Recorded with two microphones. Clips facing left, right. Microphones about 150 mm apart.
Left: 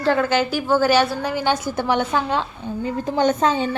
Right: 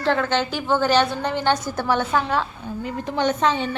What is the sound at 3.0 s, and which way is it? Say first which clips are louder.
Speech: left 2 dB; 40° left (ahead or behind).